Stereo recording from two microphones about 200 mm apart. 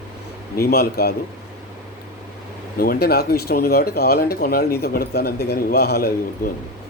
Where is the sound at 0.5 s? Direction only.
50° left (ahead or behind).